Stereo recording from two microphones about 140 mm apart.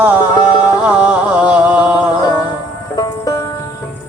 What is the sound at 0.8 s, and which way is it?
Music, 10° right (ahead or behind).